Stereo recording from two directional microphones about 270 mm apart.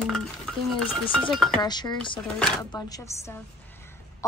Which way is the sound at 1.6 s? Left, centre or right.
Centre.